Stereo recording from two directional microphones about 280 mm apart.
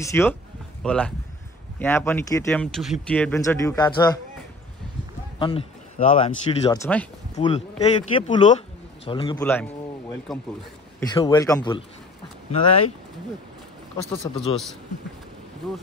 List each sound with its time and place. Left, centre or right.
0.0 s a man's voice: centre
5.4 s speech: left
6.8 s a man's voice: centre
7.3 s speech: left
9.4 s a man's voice: centre
11.0 s speech: centre
14.2 s a man's voice: centre